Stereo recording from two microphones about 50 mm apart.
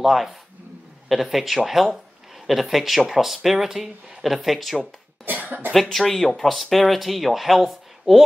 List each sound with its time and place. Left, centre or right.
0.0 s speech: centre
5.2 s cough: right
5.7 s speech: centre